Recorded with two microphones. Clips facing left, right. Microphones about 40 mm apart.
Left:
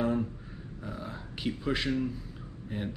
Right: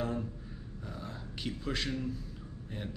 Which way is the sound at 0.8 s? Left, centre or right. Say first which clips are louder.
Left 4 dB; centre.